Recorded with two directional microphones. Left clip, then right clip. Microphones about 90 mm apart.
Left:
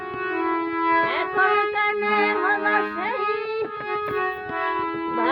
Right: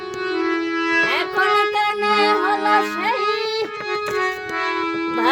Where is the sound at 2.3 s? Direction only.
25° left (ahead or behind).